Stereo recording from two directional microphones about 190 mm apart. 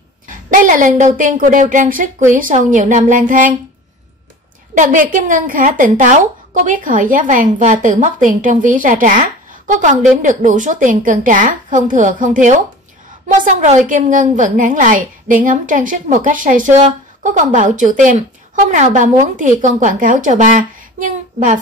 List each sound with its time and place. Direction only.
0.3 s a woman's voice: 45° right (ahead or behind)
4.7 s a woman's voice: 40° right (ahead or behind)